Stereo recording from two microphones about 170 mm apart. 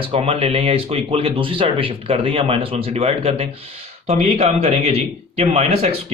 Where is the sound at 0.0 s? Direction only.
35° right (ahead or behind).